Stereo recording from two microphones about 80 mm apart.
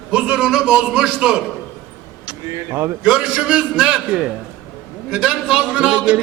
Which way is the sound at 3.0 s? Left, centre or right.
Centre.